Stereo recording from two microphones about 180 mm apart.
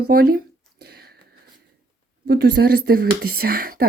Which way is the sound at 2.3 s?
65° right (ahead or behind).